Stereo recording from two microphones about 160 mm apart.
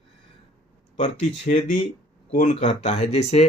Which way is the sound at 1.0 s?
50° left (ahead or behind).